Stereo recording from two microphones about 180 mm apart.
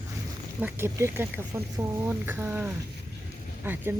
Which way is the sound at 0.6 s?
15° right (ahead or behind).